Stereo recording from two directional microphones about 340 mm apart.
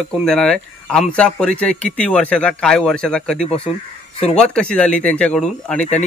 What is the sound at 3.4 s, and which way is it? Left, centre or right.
Speech, centre.